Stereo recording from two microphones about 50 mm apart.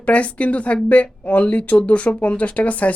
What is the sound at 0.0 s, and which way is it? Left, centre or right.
Speech, left.